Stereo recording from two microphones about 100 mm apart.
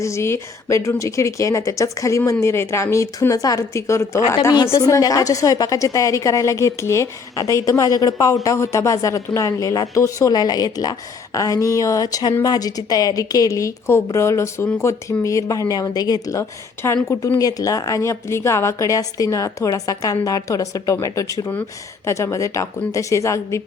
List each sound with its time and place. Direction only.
0.0 s a woman's voice: 30° left (ahead or behind)
17.3 s a woman's voice: 35° left (ahead or behind)